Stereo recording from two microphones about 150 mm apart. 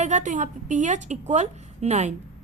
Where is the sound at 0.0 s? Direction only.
55° right (ahead or behind).